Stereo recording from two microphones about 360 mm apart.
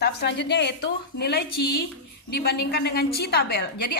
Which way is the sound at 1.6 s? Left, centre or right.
Left.